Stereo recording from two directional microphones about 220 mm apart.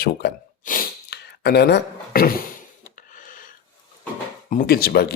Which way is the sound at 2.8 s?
40° left (ahead or behind).